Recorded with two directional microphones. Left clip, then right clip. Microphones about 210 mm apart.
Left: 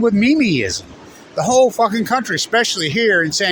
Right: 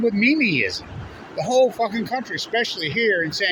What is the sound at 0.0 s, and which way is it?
Speech, 40° left (ahead or behind).